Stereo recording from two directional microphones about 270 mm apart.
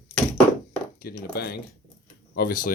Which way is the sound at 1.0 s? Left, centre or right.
Left.